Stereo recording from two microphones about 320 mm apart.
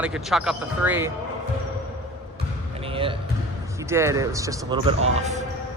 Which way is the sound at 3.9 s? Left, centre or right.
Centre.